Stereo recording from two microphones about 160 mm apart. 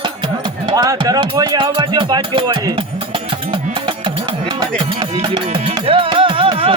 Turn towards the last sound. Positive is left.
turn(degrees=-35)  # may be behind; listen again after turning